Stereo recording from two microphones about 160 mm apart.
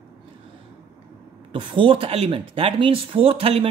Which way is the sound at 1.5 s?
35° right (ahead or behind).